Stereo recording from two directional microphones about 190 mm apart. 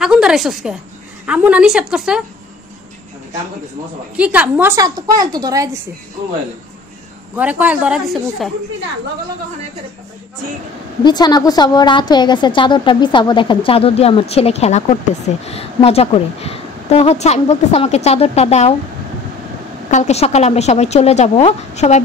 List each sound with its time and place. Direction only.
0.0 s a woman's voice: 5° right (ahead or behind)
4.2 s a woman's voice: 10° right (ahead or behind)
7.3 s a woman's voice: 10° right (ahead or behind)
11.1 s a woman's voice: 20° left (ahead or behind)
19.9 s speech: 35° left (ahead or behind)